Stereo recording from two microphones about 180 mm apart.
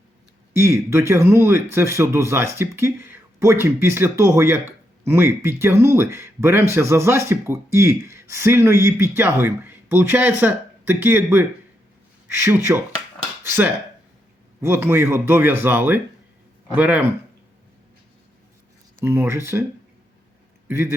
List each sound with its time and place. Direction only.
0.5 s speech: 15° right (ahead or behind)
18.9 s speech: 15° right (ahead or behind)
20.7 s speech: 15° right (ahead or behind)